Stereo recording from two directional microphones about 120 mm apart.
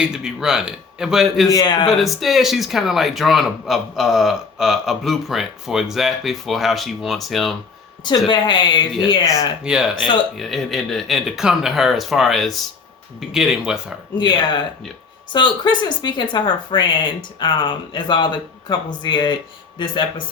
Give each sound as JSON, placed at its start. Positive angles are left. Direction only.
{"t": 0.0, "sound": "speech", "side_deg": -5}
{"t": 1.5, "sound": "speech", "side_deg": 35}
{"t": 1.9, "sound": "speech", "side_deg": 0}
{"t": 8.3, "sound": "speech", "side_deg": 40}
{"t": 9.6, "sound": "speech", "side_deg": -5}
{"t": 14.2, "sound": "speech", "side_deg": 35}